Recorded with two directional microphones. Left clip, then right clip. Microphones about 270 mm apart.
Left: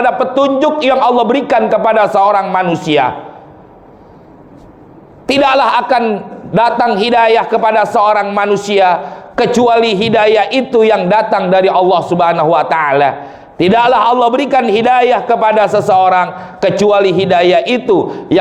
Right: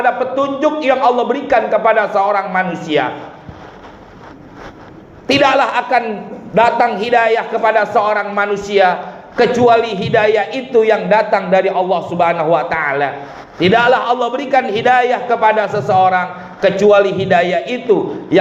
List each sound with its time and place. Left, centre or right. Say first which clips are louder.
0.0 s a man's voice: left 4 dB; left
5.2 s a man's voice: left 2 dB; left